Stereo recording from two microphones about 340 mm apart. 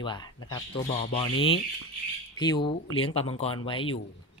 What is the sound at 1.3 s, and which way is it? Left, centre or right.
Speech, left.